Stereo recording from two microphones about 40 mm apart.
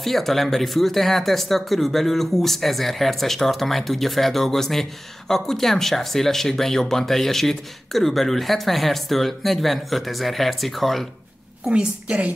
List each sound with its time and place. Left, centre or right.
0.0 s speech: centre
11.7 s a woman's voice: right